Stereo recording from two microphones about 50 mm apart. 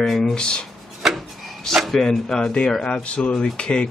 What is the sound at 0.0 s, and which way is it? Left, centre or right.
Speech, centre.